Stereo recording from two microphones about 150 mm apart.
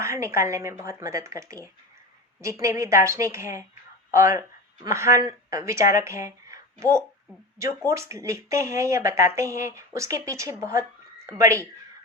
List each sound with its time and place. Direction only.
0.0 s speech: 20° right (ahead or behind)